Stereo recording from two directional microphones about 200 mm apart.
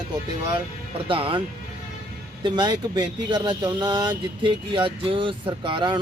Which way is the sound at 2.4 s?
20° right (ahead or behind).